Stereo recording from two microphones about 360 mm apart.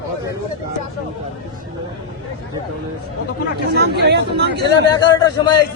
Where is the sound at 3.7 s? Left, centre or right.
Right.